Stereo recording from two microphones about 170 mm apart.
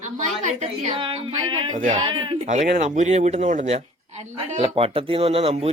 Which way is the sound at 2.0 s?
30° right (ahead or behind).